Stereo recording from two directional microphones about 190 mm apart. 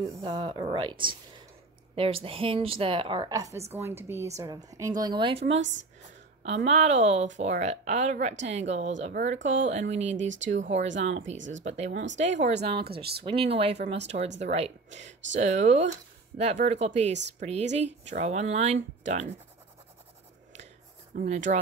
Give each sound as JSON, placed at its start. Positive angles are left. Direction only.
{"t": 0.2, "sound": "a woman's voice", "side_deg": -25}
{"t": 2.0, "sound": "a woman's voice", "side_deg": -30}
{"t": 11.9, "sound": "speech", "side_deg": -70}
{"t": 12.2, "sound": "a woman's voice", "side_deg": -35}
{"t": 12.8, "sound": "speech", "side_deg": -55}
{"t": 13.2, "sound": "a woman's voice", "side_deg": -30}
{"t": 21.1, "sound": "speech", "side_deg": -45}